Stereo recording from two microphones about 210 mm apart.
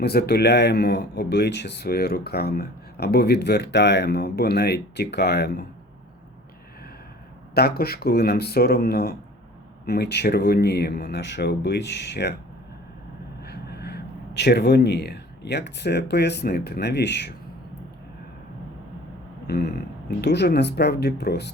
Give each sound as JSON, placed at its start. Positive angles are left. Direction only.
{"t": 0.0, "sound": "speech", "side_deg": 50}
{"t": 7.5, "sound": "speech", "side_deg": 50}
{"t": 13.4, "sound": "speech", "side_deg": 50}
{"t": 19.5, "sound": "speech", "side_deg": 50}